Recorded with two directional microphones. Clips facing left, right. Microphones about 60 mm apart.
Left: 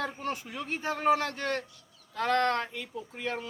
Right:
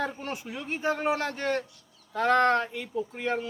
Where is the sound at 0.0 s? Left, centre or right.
Centre.